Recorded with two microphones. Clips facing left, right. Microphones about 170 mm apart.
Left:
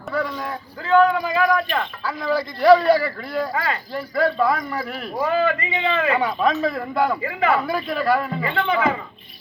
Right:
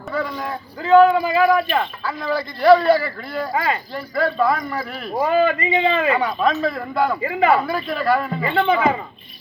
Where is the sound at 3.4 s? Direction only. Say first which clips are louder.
Right 3 dB; 15° right (ahead or behind).